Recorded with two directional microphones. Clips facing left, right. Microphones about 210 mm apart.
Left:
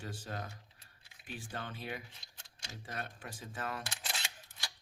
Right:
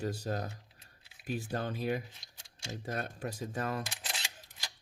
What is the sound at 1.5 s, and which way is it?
Speech, 40° right (ahead or behind).